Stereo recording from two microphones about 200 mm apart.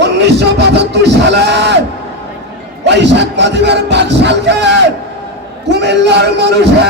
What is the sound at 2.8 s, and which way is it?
A man's voice, 60° right (ahead or behind).